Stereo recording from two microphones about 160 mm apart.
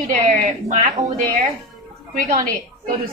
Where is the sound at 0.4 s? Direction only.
50° right (ahead or behind).